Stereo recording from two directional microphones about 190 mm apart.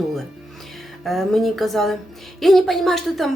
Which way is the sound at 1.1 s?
Centre (ahead or behind).